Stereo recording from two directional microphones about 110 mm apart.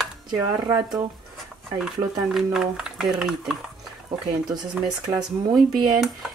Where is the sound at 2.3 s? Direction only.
5° right (ahead or behind).